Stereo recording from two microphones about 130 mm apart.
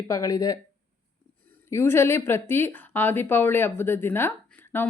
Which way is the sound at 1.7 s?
20° left (ahead or behind).